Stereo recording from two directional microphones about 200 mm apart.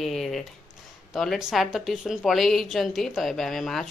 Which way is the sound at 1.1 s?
Centre (ahead or behind).